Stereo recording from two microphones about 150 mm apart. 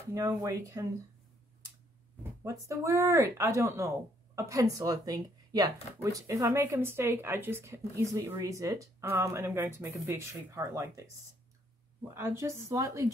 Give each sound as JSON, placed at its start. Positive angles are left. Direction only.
{"t": 0.1, "sound": "a woman's voice", "side_deg": -20}
{"t": 2.4, "sound": "a woman's voice", "side_deg": -20}
{"t": 12.1, "sound": "a woman's voice", "side_deg": -15}